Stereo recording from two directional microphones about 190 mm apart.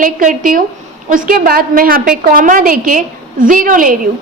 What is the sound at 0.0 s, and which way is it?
A woman's voice, 45° right (ahead or behind).